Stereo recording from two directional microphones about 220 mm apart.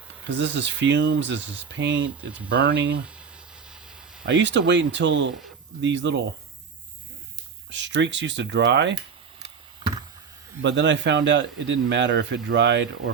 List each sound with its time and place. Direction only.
0.3 s a man's voice: 55° right (ahead or behind)
3.7 s a sound: 5° right (ahead or behind)
4.3 s a man's voice: 55° right (ahead or behind)
7.7 s speech: 55° right (ahead or behind)
10.6 s a man's voice: 55° right (ahead or behind)